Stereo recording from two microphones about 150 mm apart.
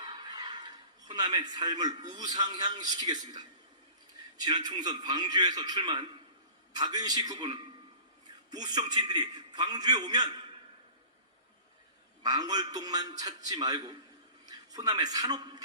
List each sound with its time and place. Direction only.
0.0 s a sound: 30° right (ahead or behind)
2.0 s a man's voice: 25° right (ahead or behind)
4.4 s a man's voice: 30° right (ahead or behind)
12.2 s a man's voice: 25° right (ahead or behind)